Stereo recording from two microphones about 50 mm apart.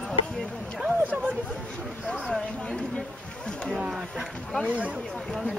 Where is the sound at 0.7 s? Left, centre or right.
Centre.